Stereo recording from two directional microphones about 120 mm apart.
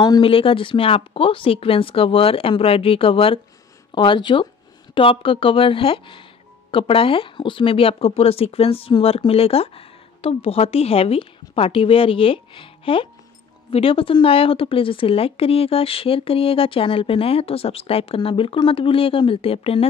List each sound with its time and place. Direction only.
0.0 s speech: 35° left (ahead or behind)
0.3 s a woman's voice: 50° left (ahead or behind)